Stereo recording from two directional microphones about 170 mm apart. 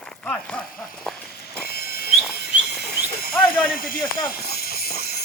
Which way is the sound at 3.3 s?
10° left (ahead or behind).